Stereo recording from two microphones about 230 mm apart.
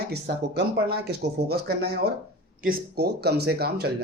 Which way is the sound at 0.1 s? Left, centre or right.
Right.